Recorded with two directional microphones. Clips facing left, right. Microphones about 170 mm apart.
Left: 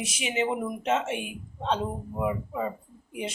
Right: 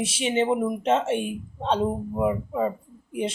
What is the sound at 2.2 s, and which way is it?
Speech, 35° right (ahead or behind).